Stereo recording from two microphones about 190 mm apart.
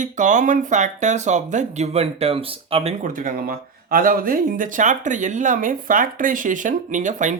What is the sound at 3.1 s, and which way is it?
Speech, 45° right (ahead or behind).